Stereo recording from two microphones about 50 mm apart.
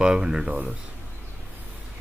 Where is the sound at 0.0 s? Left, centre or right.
Centre.